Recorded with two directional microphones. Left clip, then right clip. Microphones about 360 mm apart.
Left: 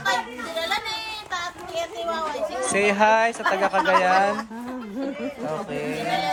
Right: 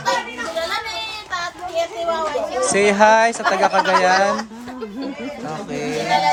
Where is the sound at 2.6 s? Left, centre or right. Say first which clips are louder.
Right 6 dB; centre.